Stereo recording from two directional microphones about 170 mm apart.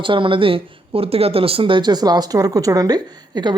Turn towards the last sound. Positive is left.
turn(degrees=-25)  # may be behind; listen again after turning